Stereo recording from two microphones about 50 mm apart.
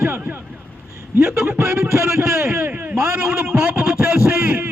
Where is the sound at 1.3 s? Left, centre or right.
Right.